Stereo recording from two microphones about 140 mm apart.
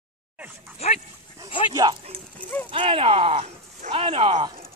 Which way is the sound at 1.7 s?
30° right (ahead or behind).